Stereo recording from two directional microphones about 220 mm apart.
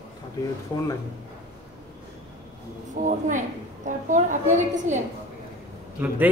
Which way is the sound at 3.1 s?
35° right (ahead or behind).